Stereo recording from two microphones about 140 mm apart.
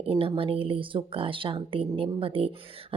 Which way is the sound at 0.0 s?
40° right (ahead or behind).